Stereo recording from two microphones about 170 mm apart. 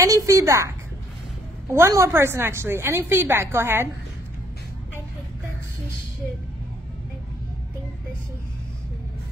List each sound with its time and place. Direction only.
0.0 s a woman's voice: 20° right (ahead or behind)
1.7 s a woman's voice: 15° right (ahead or behind)